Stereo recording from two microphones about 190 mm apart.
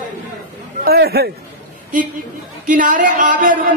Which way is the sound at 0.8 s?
55° right (ahead or behind).